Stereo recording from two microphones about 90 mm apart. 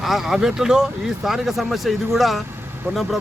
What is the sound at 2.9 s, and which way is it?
Speech, 30° right (ahead or behind).